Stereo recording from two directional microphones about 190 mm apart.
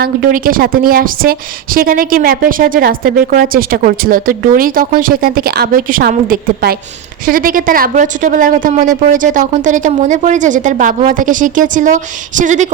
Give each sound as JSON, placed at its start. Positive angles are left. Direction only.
{"t": 0.0, "sound": "a woman's voice", "side_deg": -45}